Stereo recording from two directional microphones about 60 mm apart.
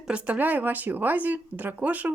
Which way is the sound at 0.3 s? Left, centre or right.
Right.